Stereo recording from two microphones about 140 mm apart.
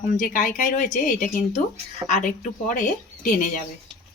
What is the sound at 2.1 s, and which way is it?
Speech, 60° left (ahead or behind).